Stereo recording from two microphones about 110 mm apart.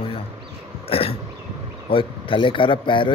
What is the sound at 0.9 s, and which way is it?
Throat clearing, 60° left (ahead or behind).